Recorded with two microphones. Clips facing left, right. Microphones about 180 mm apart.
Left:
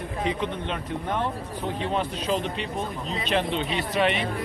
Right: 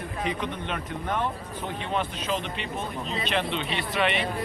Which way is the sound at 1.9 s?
35° left (ahead or behind).